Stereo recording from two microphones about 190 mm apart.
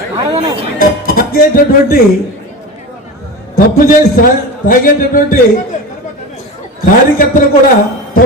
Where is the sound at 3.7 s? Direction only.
45° left (ahead or behind).